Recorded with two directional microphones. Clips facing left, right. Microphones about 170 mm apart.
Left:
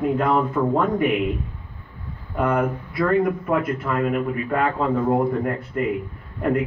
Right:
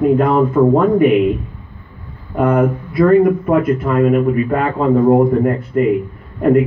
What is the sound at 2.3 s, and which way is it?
A man's voice, 45° right (ahead or behind).